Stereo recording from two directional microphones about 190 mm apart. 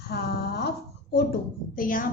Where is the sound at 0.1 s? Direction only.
60° left (ahead or behind).